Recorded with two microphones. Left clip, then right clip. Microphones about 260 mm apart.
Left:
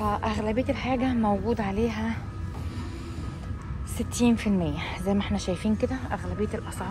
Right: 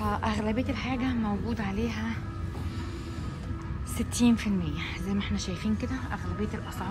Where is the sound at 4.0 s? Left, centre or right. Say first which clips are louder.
Left 2 dB; centre.